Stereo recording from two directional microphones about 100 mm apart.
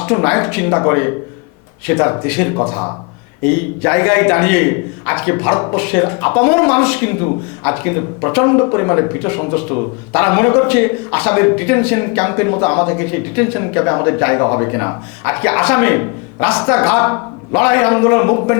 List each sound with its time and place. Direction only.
0.0 s speech: 15° left (ahead or behind)
2.6 s speech: 25° left (ahead or behind)
3.4 s a man's voice: 15° left (ahead or behind)